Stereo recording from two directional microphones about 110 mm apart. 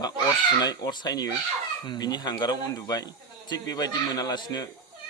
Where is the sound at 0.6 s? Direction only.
40° left (ahead or behind).